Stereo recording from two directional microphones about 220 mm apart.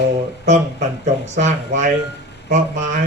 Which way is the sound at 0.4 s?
30° right (ahead or behind).